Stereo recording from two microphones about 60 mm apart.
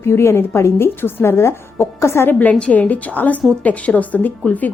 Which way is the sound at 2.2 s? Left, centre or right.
Left.